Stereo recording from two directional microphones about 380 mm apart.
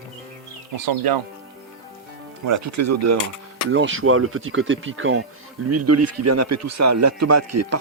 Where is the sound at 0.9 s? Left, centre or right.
Right.